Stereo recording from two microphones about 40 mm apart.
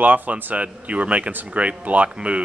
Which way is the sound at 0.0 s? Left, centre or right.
Right.